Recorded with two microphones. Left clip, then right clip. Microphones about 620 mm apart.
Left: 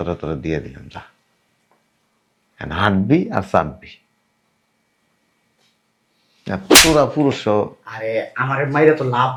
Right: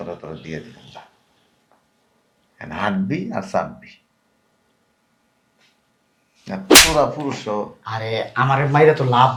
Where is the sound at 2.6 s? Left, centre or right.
Left.